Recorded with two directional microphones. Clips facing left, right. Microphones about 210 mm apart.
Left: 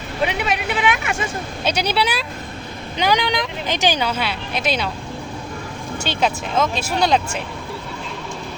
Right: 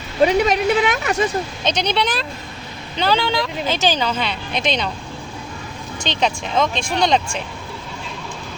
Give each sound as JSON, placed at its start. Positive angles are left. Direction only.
{"t": 0.2, "sound": "speech", "side_deg": -40}
{"t": 1.6, "sound": "speech", "side_deg": 10}
{"t": 6.0, "sound": "speech", "side_deg": 5}